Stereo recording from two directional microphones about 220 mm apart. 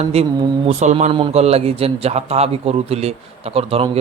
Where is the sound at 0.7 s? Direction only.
30° right (ahead or behind).